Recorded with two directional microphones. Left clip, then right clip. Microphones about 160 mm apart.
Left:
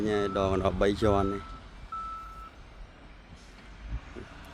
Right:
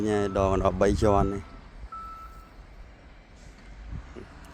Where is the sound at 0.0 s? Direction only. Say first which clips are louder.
Right 3 dB; 5° right (ahead or behind).